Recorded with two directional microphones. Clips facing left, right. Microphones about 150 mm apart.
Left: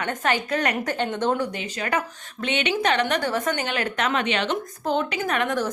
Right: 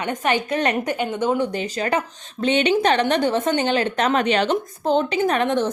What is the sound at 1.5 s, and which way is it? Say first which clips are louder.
A woman's voice: right 4 dB; 35° right (ahead or behind).